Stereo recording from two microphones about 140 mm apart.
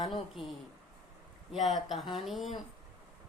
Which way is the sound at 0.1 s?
Centre (ahead or behind).